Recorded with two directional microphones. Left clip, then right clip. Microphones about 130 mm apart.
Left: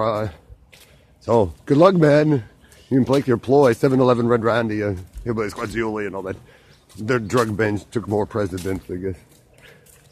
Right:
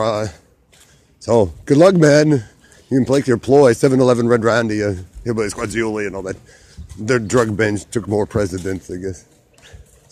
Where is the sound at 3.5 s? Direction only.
30° right (ahead or behind).